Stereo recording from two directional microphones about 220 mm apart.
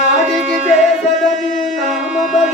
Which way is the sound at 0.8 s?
Centre (ahead or behind).